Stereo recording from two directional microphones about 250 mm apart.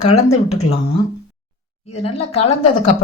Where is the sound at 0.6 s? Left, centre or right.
Left.